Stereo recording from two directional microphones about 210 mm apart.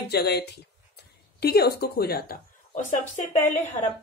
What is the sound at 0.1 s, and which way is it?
A woman's voice, 50° left (ahead or behind).